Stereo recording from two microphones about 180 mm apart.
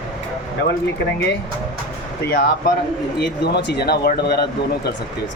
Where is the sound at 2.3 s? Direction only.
55° left (ahead or behind).